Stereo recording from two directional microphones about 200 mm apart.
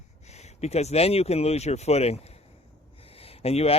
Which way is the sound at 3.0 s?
30° left (ahead or behind).